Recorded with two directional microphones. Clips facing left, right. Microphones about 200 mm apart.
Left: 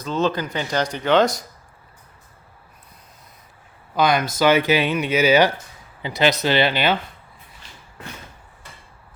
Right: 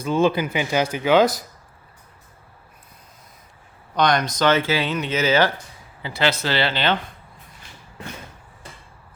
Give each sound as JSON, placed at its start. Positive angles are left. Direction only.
{"t": 0.0, "sound": "speech", "side_deg": -10}
{"t": 3.9, "sound": "speech", "side_deg": 5}